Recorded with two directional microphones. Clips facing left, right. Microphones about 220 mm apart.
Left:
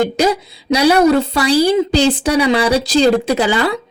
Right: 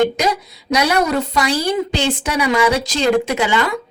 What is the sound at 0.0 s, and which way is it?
A woman's voice, 30° left (ahead or behind).